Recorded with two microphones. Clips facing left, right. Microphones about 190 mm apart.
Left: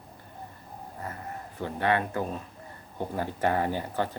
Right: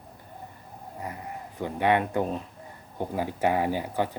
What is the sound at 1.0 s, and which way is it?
Speech, 15° right (ahead or behind).